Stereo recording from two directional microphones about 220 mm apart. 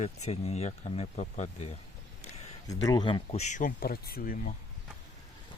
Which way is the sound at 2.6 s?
15° left (ahead or behind).